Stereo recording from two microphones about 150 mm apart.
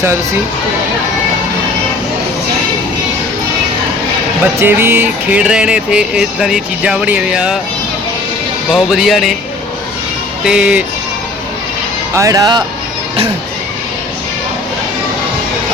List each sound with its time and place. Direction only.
4.6 s music: 15° right (ahead or behind)
8.7 s speech: centre (ahead or behind)
10.4 s music: 5° right (ahead or behind)
12.1 s speech: 20° right (ahead or behind)